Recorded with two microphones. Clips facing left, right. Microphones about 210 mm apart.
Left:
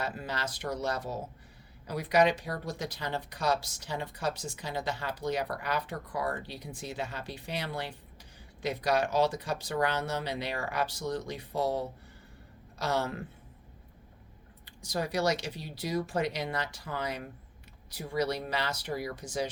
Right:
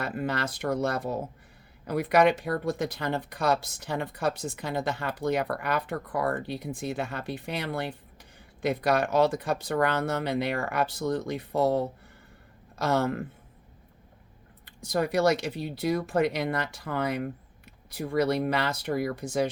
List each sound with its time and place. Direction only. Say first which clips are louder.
0.0 s speech: right 5 dB; 55° right (ahead or behind)
14.6 s speech: right 6 dB; 55° right (ahead or behind)